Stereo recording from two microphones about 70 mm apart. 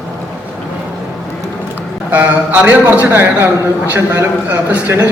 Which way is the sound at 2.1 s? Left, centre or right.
Right.